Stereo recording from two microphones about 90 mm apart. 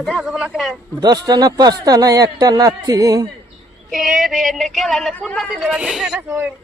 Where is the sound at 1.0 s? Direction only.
50° right (ahead or behind).